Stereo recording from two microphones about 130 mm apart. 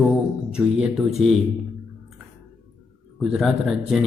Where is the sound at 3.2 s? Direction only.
Centre (ahead or behind).